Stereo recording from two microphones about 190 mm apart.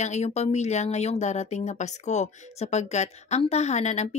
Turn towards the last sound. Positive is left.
turn(degrees=35)  # may be behind; listen again after turning